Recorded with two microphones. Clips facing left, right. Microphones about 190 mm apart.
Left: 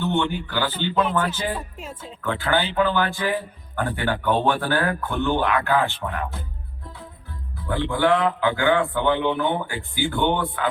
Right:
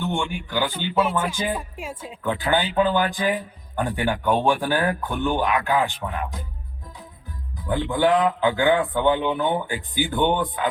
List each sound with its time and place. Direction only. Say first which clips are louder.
0.1 s a man's voice: left 3 dB; 10° right (ahead or behind)
7.5 s a man's voice: right 1 dB; 15° right (ahead or behind)